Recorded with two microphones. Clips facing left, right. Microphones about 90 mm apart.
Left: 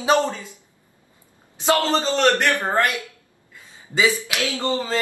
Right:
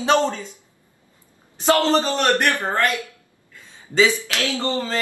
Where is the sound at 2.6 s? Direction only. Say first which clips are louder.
Even; 20° left (ahead or behind).